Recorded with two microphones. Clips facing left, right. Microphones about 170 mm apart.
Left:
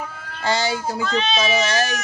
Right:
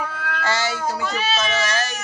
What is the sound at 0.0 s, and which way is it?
Cat, 80° right.